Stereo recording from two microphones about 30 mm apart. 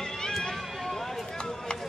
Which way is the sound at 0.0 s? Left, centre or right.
Left.